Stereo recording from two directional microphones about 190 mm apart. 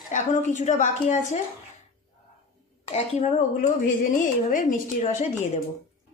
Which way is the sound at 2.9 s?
35° left (ahead or behind).